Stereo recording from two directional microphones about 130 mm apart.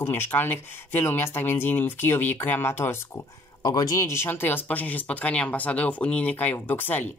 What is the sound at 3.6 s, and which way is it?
Speech, 30° left (ahead or behind).